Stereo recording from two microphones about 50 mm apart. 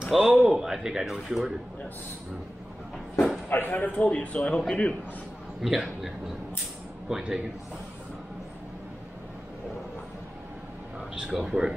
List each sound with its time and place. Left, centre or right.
0.0 s a man's voice: centre
3.4 s a man's voice: left; by 4.8 s centre
5.6 s speech: centre
7.1 s speech: centre
11.3 s speech: centre